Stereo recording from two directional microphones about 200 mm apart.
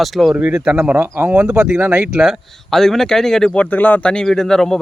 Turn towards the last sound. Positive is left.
turn(degrees=5)  # may be behind; listen again after turning